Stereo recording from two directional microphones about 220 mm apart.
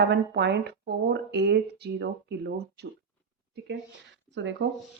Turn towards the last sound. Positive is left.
turn(degrees=-55)  # may be behind; listen again after turning